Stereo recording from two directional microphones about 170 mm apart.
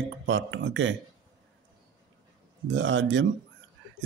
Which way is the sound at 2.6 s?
90° right.